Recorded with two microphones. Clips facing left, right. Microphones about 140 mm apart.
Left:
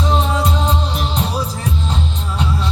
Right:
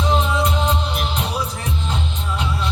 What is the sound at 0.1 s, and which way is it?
Music, 35° left (ahead or behind).